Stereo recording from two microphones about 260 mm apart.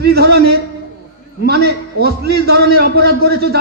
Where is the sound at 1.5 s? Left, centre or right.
Right.